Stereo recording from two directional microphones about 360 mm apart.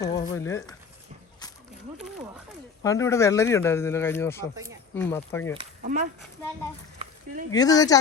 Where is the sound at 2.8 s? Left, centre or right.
Centre.